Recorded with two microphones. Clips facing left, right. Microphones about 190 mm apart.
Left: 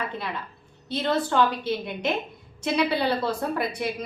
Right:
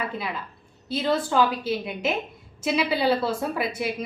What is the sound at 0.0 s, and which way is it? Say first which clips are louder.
A woman's voice: right 1 dB; 5° right (ahead or behind).